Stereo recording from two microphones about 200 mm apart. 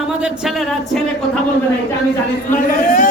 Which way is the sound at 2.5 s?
40° left (ahead or behind).